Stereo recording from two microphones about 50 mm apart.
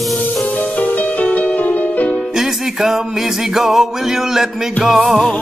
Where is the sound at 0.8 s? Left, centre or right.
Left.